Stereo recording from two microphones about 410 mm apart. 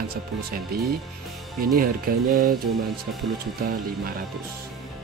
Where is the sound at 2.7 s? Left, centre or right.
Centre.